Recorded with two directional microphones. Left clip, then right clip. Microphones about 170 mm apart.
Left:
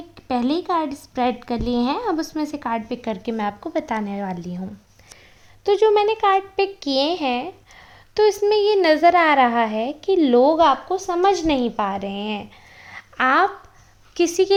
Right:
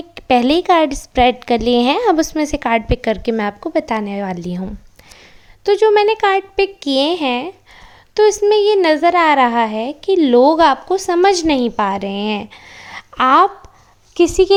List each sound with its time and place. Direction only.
0.1 s a woman's voice: 35° right (ahead or behind)
5.6 s a woman's voice: 15° right (ahead or behind)
12.7 s a sound: 30° right (ahead or behind)
14.2 s a woman's voice: 20° right (ahead or behind)